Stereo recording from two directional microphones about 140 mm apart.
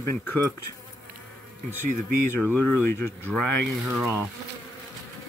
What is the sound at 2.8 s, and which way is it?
Speech, 15° left (ahead or behind).